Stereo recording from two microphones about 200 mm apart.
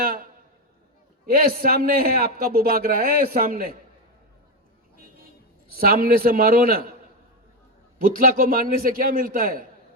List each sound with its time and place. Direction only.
0.0 s a sound: 45° right (ahead or behind)
1.3 s a man's voice: 50° right (ahead or behind)
5.8 s a man's voice: 45° right (ahead or behind)
7.9 s a man's voice: 45° right (ahead or behind)